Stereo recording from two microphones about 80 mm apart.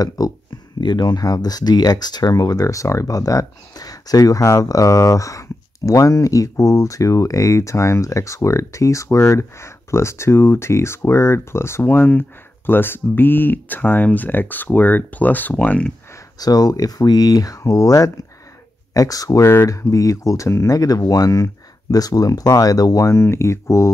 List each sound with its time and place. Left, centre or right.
0.2 s speech: left
0.7 s speech: left; by 15.9 s centre
16.3 s speech: left